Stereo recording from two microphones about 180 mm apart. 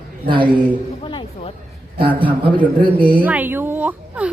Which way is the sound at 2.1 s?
10° left (ahead or behind).